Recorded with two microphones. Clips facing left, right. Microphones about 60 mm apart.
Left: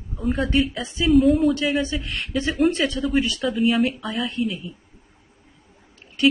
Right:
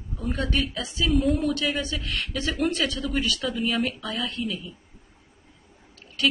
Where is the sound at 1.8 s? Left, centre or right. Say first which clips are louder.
Left 4 dB; left.